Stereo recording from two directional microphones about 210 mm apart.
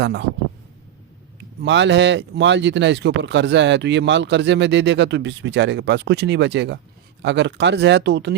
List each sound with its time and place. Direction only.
0.0 s speech: 55° right (ahead or behind)
1.6 s speech: 55° right (ahead or behind)